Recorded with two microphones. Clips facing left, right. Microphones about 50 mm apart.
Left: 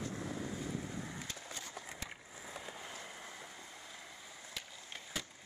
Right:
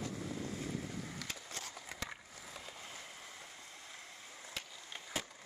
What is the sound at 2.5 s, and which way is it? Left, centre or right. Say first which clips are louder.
Vehicle: left 3 dB; centre.